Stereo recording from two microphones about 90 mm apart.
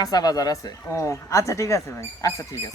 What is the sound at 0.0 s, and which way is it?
Speech, 45° left (ahead or behind).